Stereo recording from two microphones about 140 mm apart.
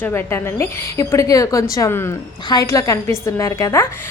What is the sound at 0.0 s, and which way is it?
A woman's voice, 15° left (ahead or behind).